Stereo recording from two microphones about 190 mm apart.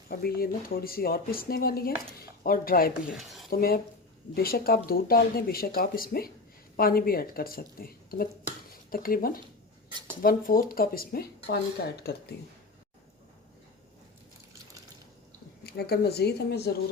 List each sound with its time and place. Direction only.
0.1 s speech: 55° left (ahead or behind)
3.1 s speech: centre (ahead or behind)
3.5 s speech: 50° left (ahead or behind)
15.6 s a woman's voice: 60° left (ahead or behind)